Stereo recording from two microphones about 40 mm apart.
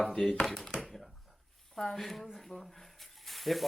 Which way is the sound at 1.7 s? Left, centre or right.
Centre.